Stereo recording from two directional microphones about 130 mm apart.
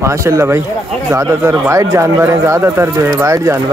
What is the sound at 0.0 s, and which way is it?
Speech, 25° right (ahead or behind).